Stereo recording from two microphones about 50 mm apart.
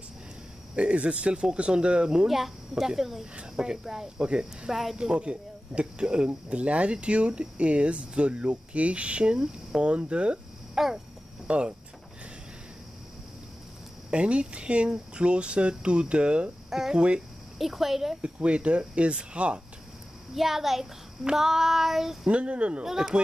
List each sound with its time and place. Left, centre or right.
0.7 s speech: right
2.2 s a woman's voice: centre
2.7 s child singing: centre
4.9 s speech: centre
10.7 s a sound: centre
11.4 s speech: right
14.1 s speech: right
16.7 s child singing: centre
17.6 s a woman's voice: centre
18.2 s speech: right
20.3 s child singing: centre
22.3 s speech: right
22.8 s child singing: centre